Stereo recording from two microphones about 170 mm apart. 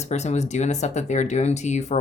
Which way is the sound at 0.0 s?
40° left (ahead or behind).